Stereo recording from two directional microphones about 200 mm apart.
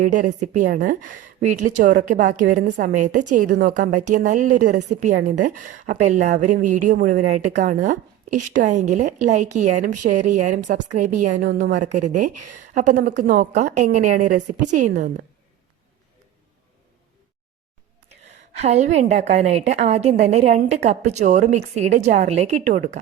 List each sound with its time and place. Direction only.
0.0 s a woman's voice: 40° right (ahead or behind)
18.6 s a woman's voice: 35° right (ahead or behind)